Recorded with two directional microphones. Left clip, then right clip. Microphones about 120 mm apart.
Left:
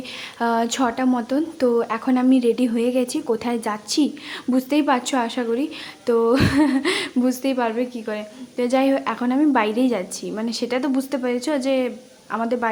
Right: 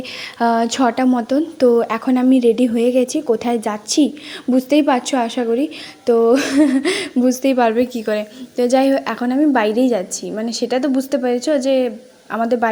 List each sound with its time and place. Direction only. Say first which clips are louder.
0.3 s speech: right 5 dB; 35° right (ahead or behind)
7.4 s a woman's voice: right 7 dB; 50° right (ahead or behind)
8.5 s speech: right 5 dB; 25° right (ahead or behind)